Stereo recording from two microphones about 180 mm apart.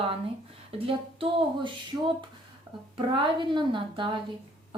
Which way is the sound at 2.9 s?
30° right (ahead or behind).